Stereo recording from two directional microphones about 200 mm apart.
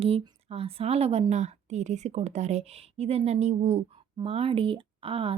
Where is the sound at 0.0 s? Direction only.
30° right (ahead or behind).